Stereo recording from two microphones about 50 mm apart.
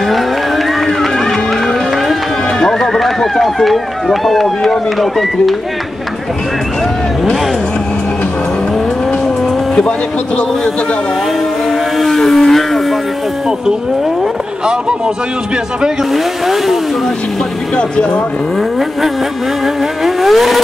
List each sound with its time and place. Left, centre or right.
0.7 s music: centre
2.6 s speech: centre
12.0 s a sound: centre
16.1 s speech: centre
17.7 s speech: left
19.6 s vehicle: centre